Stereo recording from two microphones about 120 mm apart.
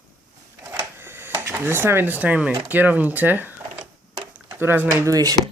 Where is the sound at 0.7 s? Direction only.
20° right (ahead or behind).